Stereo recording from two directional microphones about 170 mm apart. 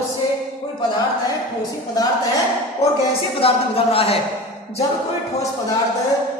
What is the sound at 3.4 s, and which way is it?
Speech, 35° left (ahead or behind).